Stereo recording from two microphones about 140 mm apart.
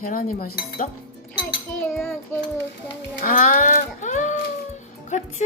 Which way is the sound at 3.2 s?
70° left (ahead or behind).